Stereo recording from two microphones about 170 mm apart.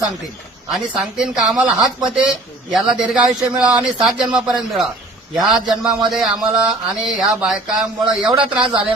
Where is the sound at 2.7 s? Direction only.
5° right (ahead or behind).